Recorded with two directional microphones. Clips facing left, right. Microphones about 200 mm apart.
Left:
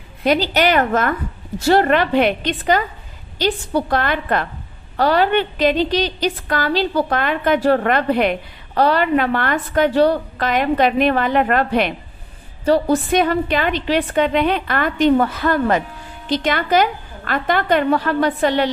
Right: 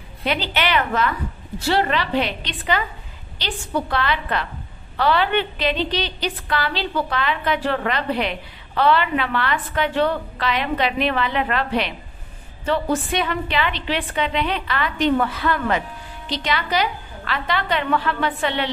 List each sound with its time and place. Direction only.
0.2 s a woman's voice: 40° left (ahead or behind)
12.6 s a woman's voice: 40° left (ahead or behind)